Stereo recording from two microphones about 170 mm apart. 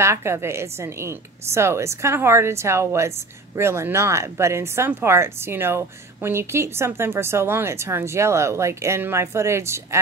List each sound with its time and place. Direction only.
0.0 s speech: 15° right (ahead or behind)